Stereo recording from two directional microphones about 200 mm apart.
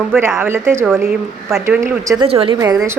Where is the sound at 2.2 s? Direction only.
25° right (ahead or behind).